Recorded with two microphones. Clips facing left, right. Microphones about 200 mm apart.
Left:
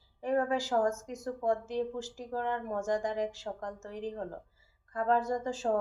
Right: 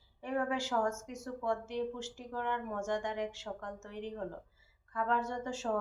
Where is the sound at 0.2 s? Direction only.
40° left (ahead or behind).